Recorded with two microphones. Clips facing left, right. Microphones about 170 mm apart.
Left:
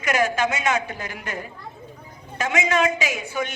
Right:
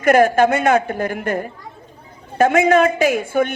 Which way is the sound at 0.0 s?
55° right (ahead or behind).